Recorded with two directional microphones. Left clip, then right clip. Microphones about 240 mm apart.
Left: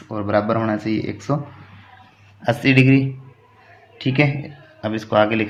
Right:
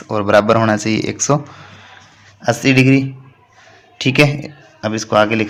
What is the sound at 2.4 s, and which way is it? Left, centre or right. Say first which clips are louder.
A man's voice: right 3 dB; right.